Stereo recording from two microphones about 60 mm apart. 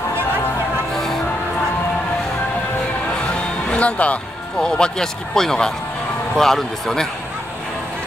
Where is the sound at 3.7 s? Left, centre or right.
Left; by 7.0 s centre.